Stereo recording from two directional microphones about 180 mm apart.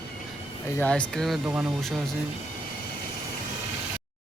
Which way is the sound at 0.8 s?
5° left (ahead or behind).